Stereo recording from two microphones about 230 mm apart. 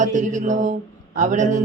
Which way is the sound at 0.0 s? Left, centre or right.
Right.